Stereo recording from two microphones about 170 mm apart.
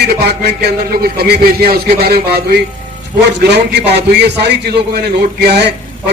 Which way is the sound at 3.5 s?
80° right.